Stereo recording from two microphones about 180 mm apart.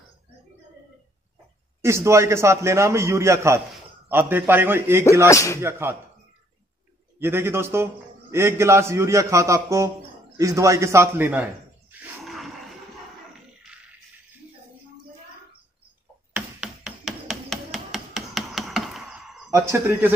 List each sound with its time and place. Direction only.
1.8 s a man's voice: 15° right (ahead or behind)
5.3 s speech: 15° left (ahead or behind)
5.6 s a man's voice: 15° right (ahead or behind)
7.2 s a man's voice: 15° right (ahead or behind)
12.0 s a sound: centre (ahead or behind)
16.3 s a sound: 5° right (ahead or behind)
19.5 s a man's voice: 15° right (ahead or behind)